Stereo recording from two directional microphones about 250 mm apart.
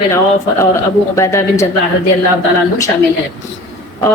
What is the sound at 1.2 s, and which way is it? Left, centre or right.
Speech, centre.